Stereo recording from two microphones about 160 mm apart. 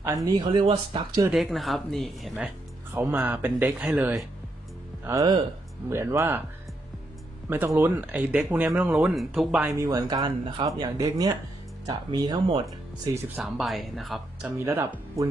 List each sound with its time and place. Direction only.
0.0 s speech: 20° right (ahead or behind)
1.3 s speech: centre (ahead or behind)
5.0 s speech: 20° right (ahead or behind)
7.4 s speech: 15° right (ahead or behind)
9.8 s speech: 20° right (ahead or behind)
13.3 s speech: 5° right (ahead or behind)
14.6 s speech: 15° right (ahead or behind)